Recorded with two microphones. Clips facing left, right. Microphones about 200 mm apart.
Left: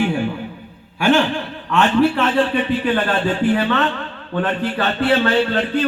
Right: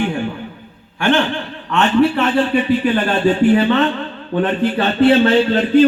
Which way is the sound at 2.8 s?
15° right (ahead or behind).